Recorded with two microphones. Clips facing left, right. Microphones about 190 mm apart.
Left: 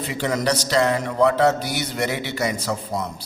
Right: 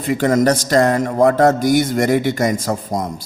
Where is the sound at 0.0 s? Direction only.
50° right (ahead or behind).